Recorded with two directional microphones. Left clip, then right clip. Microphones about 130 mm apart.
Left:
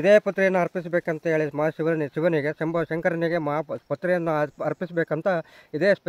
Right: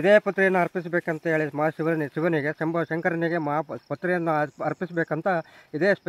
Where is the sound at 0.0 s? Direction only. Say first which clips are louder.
Left 1 dB; 35° left (ahead or behind).